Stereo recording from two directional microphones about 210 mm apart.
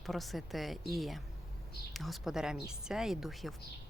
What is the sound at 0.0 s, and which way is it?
Speech, centre (ahead or behind).